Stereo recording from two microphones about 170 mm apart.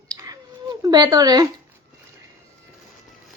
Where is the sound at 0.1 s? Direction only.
20° right (ahead or behind).